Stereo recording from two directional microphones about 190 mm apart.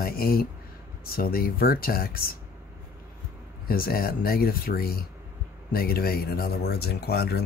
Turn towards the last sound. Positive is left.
turn(degrees=55)  # may be behind; listen again after turning